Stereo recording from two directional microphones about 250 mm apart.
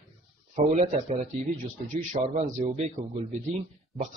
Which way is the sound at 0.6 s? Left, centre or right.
Right.